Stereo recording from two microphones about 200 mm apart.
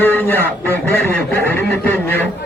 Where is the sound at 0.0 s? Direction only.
10° left (ahead or behind).